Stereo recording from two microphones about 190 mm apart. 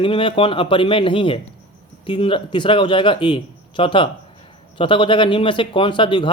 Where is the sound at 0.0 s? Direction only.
25° left (ahead or behind).